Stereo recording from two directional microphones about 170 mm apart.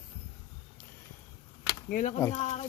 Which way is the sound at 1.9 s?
50° left (ahead or behind).